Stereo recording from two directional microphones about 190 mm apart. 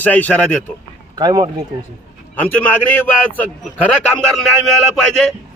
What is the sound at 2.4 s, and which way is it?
Speech, 10° left (ahead or behind).